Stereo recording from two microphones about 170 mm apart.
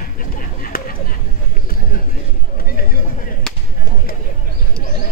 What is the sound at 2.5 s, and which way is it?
Chatter, 60° left (ahead or behind).